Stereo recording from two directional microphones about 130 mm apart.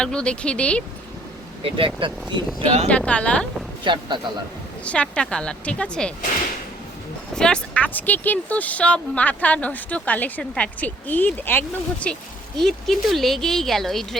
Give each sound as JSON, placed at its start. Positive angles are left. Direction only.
{"t": 0.0, "sound": "speech", "side_deg": 5}
{"t": 1.6, "sound": "speech", "side_deg": -40}
{"t": 2.6, "sound": "speech", "side_deg": -55}
{"t": 2.9, "sound": "speech", "side_deg": 10}
{"t": 3.8, "sound": "speech", "side_deg": -35}
{"t": 4.9, "sound": "speech", "side_deg": 10}
{"t": 7.3, "sound": "speech", "side_deg": 5}